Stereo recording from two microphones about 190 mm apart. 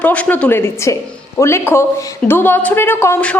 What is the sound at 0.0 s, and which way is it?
A woman's voice, 10° left (ahead or behind).